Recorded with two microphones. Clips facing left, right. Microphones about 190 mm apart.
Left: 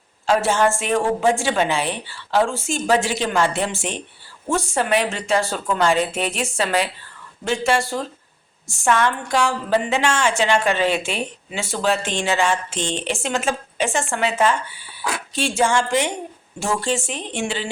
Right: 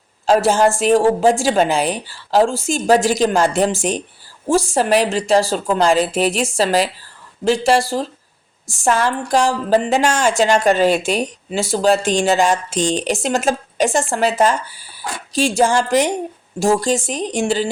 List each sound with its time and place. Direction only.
0.3 s speech: 40° right (ahead or behind)